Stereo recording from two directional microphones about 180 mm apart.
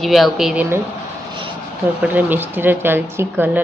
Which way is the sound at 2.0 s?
10° right (ahead or behind).